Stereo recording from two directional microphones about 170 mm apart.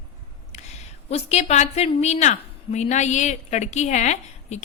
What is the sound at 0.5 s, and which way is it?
A woman's voice, 40° left (ahead or behind).